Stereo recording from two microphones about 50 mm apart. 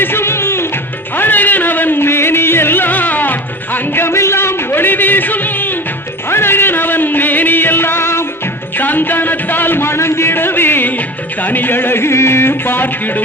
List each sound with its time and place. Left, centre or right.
0.0 s music: left
1.1 s music: left
4.0 s a sound: left
6.3 s music: left
8.8 s a sound: left
11.4 s music: left